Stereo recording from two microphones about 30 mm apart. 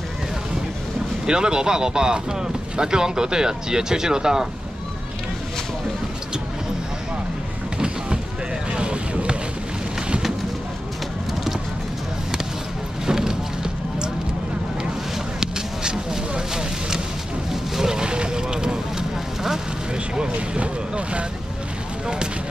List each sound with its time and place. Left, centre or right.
1.2 s speech: right
8.7 s vehicle: right
13.0 s a sound: centre
15.4 s a sound: right
17.5 s vehicle: centre
20.5 s speech: right